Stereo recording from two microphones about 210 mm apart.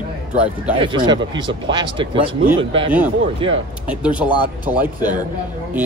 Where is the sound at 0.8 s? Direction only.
20° right (ahead or behind).